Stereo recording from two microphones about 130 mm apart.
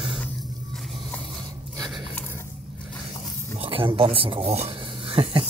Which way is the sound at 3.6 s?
40° right (ahead or behind).